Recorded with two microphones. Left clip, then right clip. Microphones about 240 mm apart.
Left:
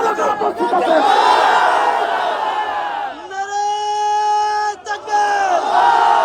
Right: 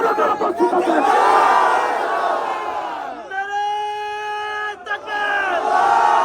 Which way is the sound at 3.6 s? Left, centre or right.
Left.